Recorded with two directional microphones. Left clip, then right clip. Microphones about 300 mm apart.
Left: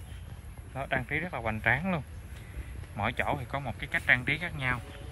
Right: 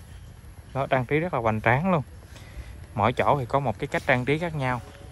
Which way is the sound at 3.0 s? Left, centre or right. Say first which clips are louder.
Right 9 dB; centre.